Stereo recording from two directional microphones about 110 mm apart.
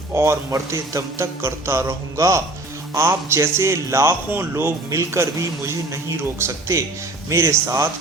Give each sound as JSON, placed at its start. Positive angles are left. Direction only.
{"t": 0.1, "sound": "a man's voice", "side_deg": -25}